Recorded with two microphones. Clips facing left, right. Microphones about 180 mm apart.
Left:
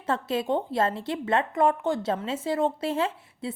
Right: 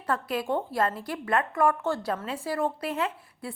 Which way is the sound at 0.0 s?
25° left (ahead or behind).